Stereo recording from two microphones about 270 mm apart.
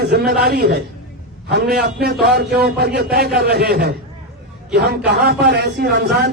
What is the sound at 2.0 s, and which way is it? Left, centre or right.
A man's voice, right.